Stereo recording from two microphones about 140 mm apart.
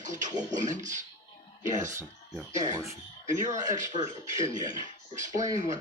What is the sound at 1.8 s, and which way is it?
Speech, 20° right (ahead or behind).